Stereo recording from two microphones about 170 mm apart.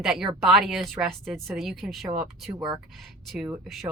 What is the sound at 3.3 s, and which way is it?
Speech, 5° right (ahead or behind).